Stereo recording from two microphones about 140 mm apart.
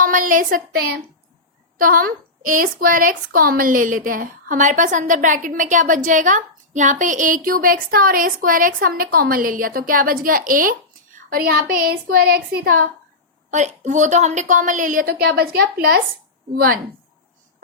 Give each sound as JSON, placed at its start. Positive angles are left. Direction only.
{"t": 0.0, "sound": "a woman's voice", "side_deg": -70}
{"t": 1.8, "sound": "a woman's voice", "side_deg": -90}
{"t": 13.5, "sound": "a woman's voice", "side_deg": -60}